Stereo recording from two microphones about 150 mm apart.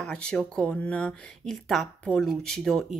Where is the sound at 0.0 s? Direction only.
5° left (ahead or behind).